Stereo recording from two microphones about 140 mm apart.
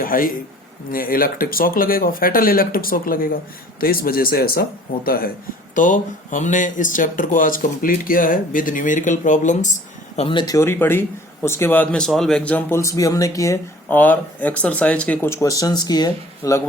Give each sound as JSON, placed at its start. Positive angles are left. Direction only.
{"t": 0.0, "sound": "a man's voice", "side_deg": 85}
{"t": 5.7, "sound": "speech", "side_deg": 70}
{"t": 10.2, "sound": "speech", "side_deg": 35}
{"t": 12.8, "sound": "speech", "side_deg": 25}
{"t": 13.8, "sound": "speech", "side_deg": 10}